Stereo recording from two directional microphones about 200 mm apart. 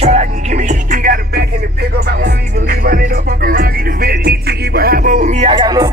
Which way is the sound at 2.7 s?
50° right (ahead or behind).